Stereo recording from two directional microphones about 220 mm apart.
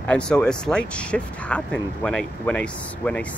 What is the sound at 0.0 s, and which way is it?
Speech, 5° left (ahead or behind).